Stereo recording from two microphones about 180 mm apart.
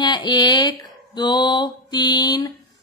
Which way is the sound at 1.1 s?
25° left (ahead or behind).